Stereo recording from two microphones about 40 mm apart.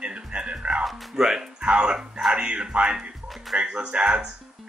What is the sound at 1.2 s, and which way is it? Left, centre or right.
Speech, centre.